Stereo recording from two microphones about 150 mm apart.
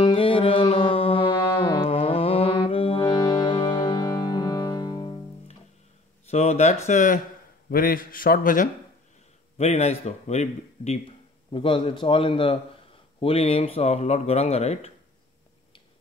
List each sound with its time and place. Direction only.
0.0 s music: 35° left (ahead or behind)
6.2 s speech: 45° left (ahead or behind)
7.7 s a man's voice: 75° left (ahead or behind)
9.6 s a man's voice: 45° left (ahead or behind)